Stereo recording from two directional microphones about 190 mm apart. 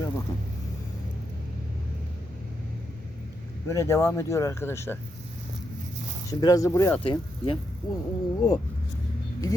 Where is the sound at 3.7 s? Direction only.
15° left (ahead or behind).